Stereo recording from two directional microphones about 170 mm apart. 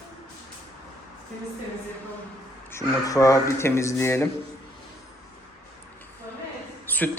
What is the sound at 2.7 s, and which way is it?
A man's voice, 20° left (ahead or behind).